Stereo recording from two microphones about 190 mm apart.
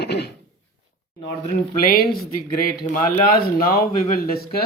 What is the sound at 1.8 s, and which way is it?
Speech, 50° left (ahead or behind).